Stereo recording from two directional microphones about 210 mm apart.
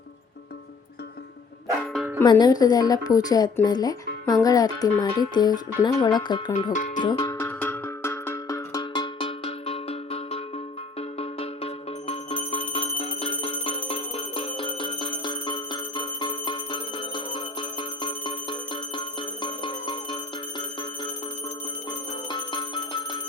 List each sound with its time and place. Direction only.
2.1 s speech: 20° left (ahead or behind)
6.7 s music: 35° left (ahead or behind)
7.0 s cowbell: 20° left (ahead or behind)
11.2 s music: 30° left (ahead or behind)
20.6 s bell: 20° left (ahead or behind)